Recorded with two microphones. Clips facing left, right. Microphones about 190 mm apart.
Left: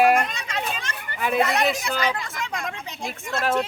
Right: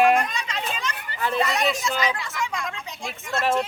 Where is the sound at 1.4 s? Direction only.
55° left (ahead or behind).